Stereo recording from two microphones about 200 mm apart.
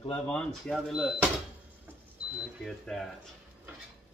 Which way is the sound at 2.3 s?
Centre (ahead or behind).